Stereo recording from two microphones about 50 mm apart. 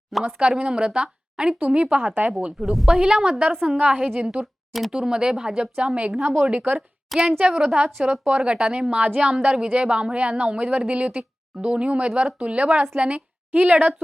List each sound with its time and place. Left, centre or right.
0.3 s a woman's voice: centre
2.6 s a woman's voice: centre
2.9 s speech: centre
3.8 s a woman's voice: right
6.2 s a woman's voice: right
7.3 s a woman's voice: right